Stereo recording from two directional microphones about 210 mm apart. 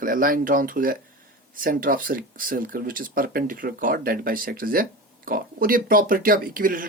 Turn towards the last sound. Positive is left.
turn(degrees=-40)  # may be behind; listen again after turning